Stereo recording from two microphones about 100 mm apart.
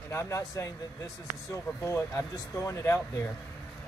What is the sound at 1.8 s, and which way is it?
Speech, 30° left (ahead or behind).